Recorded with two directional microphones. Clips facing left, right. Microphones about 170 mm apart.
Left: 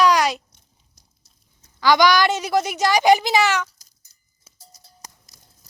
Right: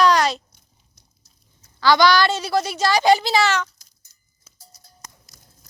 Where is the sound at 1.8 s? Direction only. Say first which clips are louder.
Even; 15° left (ahead or behind).